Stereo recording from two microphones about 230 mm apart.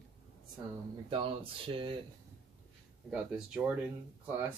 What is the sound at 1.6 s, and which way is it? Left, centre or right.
Speech, right.